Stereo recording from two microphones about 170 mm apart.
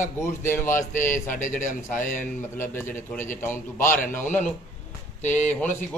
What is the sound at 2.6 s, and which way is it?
A man's voice, 15° left (ahead or behind).